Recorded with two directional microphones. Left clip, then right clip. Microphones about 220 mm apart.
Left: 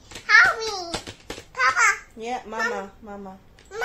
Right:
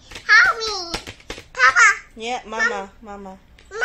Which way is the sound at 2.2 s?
30° right (ahead or behind).